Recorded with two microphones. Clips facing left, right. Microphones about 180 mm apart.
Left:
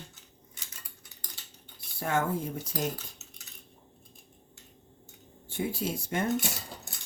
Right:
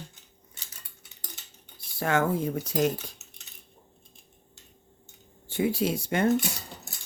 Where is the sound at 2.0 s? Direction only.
85° right.